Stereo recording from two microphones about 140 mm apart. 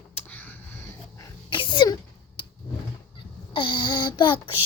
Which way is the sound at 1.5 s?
35° left (ahead or behind).